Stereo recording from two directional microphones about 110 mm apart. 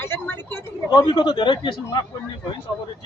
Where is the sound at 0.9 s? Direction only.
40° left (ahead or behind).